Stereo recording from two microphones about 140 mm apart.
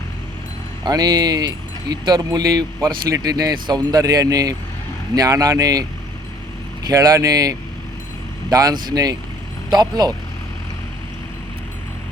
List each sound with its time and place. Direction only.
0.9 s speech: 30° right (ahead or behind)
6.8 s speech: 25° right (ahead or behind)